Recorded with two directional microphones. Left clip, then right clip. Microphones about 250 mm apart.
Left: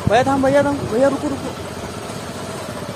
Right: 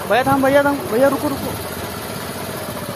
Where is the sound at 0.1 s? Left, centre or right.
Centre.